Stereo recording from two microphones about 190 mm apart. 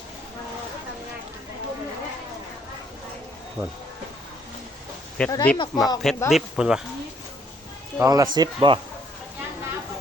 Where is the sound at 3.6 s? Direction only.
20° right (ahead or behind).